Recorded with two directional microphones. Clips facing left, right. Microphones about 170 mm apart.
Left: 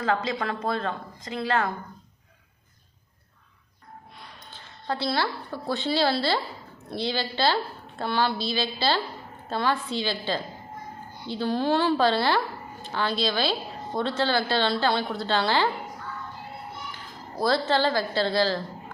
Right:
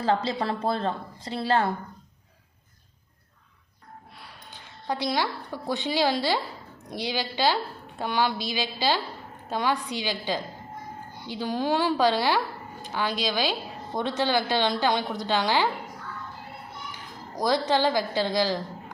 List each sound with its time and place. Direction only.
0.0 s a woman's voice: 30° right (ahead or behind)
4.2 s a woman's voice: 10° right (ahead or behind)
17.3 s a woman's voice: 15° right (ahead or behind)